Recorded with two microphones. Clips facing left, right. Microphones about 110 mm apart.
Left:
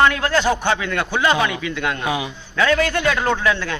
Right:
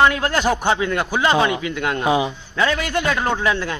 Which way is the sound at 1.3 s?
30° right (ahead or behind).